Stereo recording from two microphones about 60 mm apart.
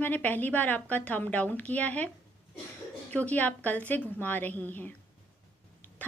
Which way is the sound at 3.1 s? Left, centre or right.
Left.